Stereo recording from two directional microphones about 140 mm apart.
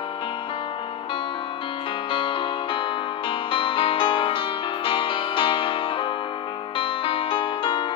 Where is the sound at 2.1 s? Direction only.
35° left (ahead or behind).